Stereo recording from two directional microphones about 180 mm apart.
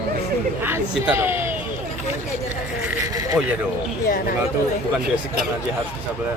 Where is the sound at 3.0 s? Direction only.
20° right (ahead or behind).